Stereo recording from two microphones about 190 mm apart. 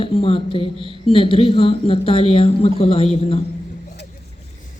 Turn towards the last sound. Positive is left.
turn(degrees=35)  # may be behind; listen again after turning